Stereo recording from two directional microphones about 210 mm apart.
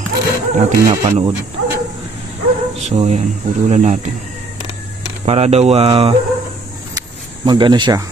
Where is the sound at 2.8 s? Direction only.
30° right (ahead or behind).